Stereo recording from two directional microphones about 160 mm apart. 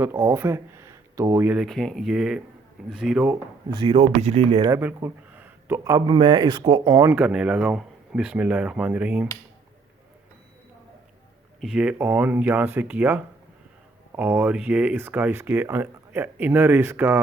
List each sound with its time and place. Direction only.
0.0 s speech: 15° right (ahead or behind)
1.5 s speech: centre (ahead or behind)
3.7 s speech: 30° right (ahead or behind)
4.7 s speech: 10° right (ahead or behind)
7.1 s speech: 5° right (ahead or behind)
11.6 s speech: 5° right (ahead or behind)